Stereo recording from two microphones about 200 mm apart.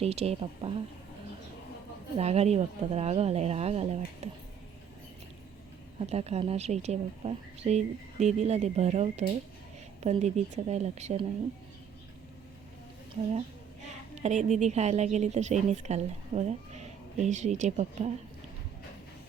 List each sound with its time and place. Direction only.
0.0 s a woman's voice: 30° right (ahead or behind)
2.1 s a woman's voice: 30° right (ahead or behind)
6.0 s a woman's voice: 30° right (ahead or behind)
14.2 s a woman's voice: 35° right (ahead or behind)